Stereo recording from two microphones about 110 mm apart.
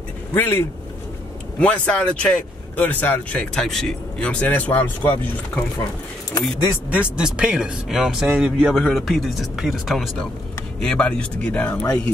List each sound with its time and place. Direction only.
0.3 s speech: 20° left (ahead or behind)
6.9 s speech: 10° right (ahead or behind); by 12.0 s 15° left (ahead or behind)